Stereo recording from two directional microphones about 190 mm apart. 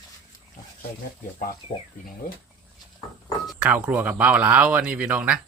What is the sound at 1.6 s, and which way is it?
Speech, 30° left (ahead or behind).